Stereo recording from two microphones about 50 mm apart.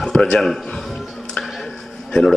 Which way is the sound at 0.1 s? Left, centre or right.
Centre.